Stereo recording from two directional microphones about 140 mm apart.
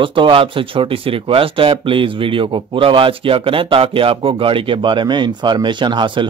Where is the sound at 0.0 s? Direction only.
35° right (ahead or behind).